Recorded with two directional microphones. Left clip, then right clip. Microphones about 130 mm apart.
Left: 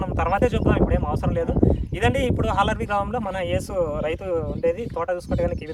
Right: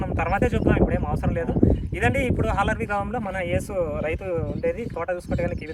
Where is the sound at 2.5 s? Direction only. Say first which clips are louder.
Left 2 dB; 50° left (ahead or behind).